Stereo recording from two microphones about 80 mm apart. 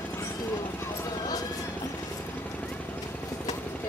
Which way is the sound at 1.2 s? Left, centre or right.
Left.